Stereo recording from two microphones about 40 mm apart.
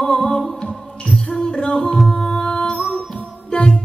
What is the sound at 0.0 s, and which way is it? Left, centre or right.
Music, centre.